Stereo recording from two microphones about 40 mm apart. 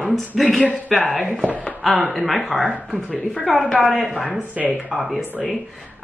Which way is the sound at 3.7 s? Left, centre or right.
Centre.